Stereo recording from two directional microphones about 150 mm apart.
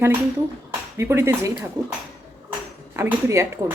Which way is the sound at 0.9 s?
15° right (ahead or behind).